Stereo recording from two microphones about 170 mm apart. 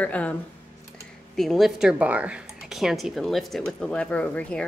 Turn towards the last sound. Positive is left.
turn(degrees=10)  # may be behind; listen again after turning